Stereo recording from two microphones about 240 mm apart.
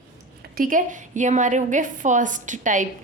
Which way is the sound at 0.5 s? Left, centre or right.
Right.